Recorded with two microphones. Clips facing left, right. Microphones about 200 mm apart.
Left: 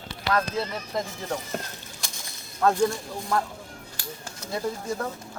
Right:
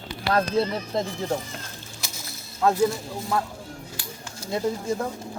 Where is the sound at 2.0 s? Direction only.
5° right (ahead or behind).